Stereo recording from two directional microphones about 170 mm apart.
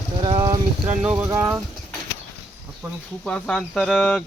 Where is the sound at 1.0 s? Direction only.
10° right (ahead or behind).